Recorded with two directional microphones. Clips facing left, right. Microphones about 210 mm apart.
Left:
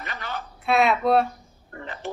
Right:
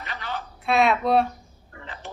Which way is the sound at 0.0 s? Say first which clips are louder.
Even; 45° left (ahead or behind).